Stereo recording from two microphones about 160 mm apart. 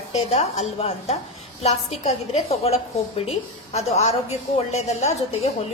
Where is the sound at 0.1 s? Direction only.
45° left (ahead or behind).